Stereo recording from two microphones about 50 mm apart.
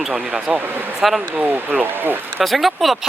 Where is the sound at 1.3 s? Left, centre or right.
Right.